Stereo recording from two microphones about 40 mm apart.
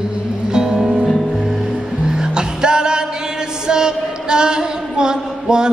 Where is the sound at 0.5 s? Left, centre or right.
Centre.